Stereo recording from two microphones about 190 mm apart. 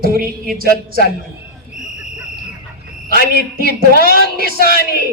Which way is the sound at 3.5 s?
50° right (ahead or behind).